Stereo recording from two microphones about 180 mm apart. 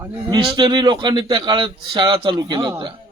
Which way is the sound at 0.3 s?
25° right (ahead or behind).